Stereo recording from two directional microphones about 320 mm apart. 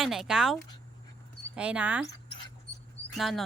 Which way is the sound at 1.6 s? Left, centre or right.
Centre.